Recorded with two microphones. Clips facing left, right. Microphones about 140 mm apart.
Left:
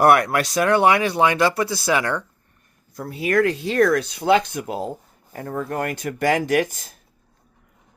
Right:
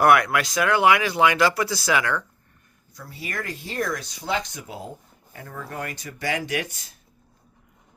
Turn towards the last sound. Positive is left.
turn(degrees=45)  # may be behind; listen again after turning